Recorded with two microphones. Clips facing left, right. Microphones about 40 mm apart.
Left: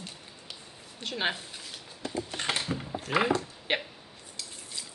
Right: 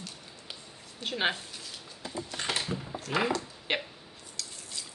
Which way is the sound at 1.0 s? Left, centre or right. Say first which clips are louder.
Right 1 dB; centre.